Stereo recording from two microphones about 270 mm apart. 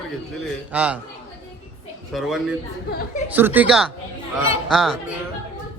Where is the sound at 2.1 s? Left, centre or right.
Centre.